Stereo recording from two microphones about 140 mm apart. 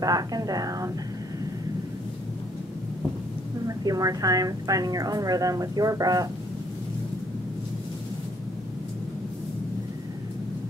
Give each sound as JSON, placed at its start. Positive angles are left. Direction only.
{"t": 0.0, "sound": "a woman's voice", "side_deg": -25}
{"t": 3.6, "sound": "a woman's voice", "side_deg": -25}